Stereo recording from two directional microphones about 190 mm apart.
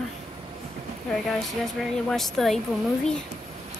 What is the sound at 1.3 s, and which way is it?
A woman's voice, centre (ahead or behind).